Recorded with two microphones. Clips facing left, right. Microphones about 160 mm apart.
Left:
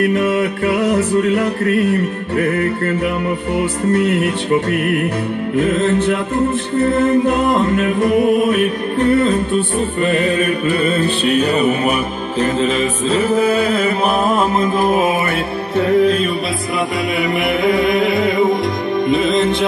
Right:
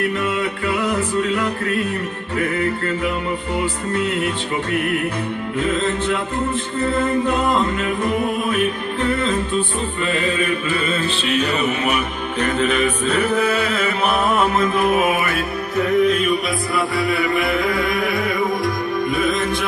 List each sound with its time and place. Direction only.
0.1 s music: 50° left (ahead or behind)
10.0 s music: 50° left (ahead or behind); by 16.3 s 30° left (ahead or behind)
17.2 s music: 20° left (ahead or behind)